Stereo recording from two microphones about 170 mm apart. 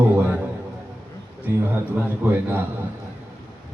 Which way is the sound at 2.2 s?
15° right (ahead or behind).